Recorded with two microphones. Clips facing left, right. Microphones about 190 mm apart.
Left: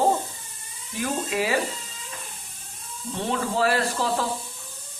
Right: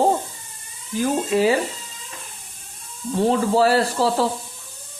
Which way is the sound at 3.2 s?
35° right (ahead or behind).